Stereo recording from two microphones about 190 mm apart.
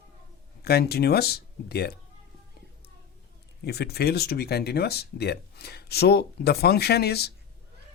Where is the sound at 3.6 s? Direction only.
60° left (ahead or behind).